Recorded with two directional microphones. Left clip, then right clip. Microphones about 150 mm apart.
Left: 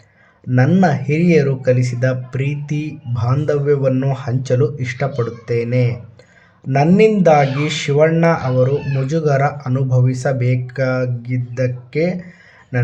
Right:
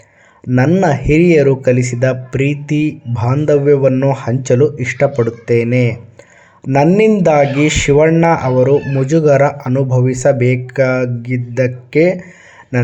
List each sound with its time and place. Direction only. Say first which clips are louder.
0.5 s speech: right 4 dB; 15° right (ahead or behind)
0.8 s speech: right 5 dB; 30° right (ahead or behind)
7.2 s speech: right 2 dB; 30° right (ahead or behind)